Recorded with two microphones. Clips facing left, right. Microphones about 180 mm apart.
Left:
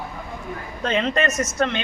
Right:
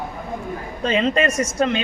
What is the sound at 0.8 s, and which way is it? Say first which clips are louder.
Speech: right 3 dB; 10° right (ahead or behind).